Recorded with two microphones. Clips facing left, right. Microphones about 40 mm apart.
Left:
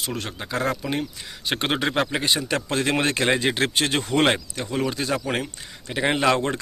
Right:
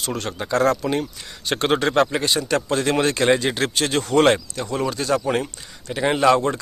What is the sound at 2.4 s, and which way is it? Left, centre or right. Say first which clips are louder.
Speech: right 3 dB; left.